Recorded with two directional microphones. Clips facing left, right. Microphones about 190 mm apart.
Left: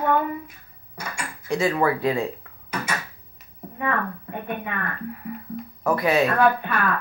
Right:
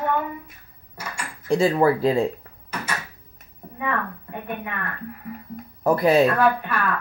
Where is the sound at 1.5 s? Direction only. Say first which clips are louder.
Right 4 dB; 30° right (ahead or behind).